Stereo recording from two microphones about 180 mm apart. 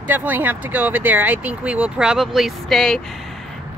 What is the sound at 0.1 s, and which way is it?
Speech, 10° right (ahead or behind).